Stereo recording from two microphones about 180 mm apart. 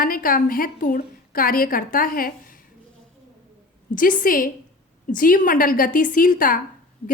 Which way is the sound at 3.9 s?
50° left (ahead or behind).